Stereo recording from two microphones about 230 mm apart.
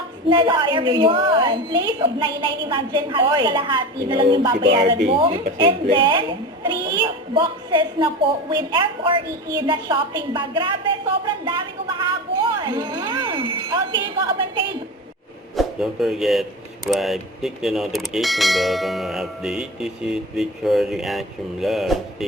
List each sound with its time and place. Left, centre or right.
0.3 s a woman's voice: right
4.5 s speech: right
5.0 s a woman's voice: right
15.5 s speech: centre